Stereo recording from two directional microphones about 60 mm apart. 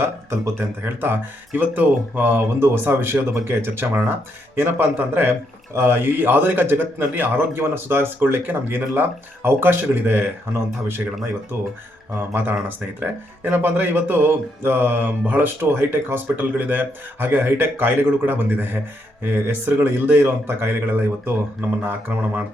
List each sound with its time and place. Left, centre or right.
0.0 s speech: right
1.0 s speech: right
10.5 s speech: right
12.3 s speech: right
15.7 s speech: right